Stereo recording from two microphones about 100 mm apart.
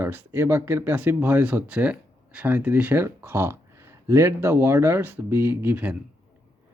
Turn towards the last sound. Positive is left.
turn(degrees=-20)  # may be behind; listen again after turning